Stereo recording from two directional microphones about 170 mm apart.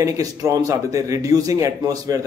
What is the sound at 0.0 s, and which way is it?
A man's voice, 20° right (ahead or behind).